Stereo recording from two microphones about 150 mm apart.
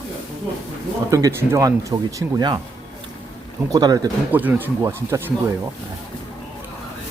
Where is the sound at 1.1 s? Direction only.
20° right (ahead or behind).